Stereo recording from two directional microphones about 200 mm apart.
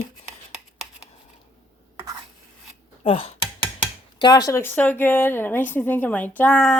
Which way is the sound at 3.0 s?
30° left (ahead or behind).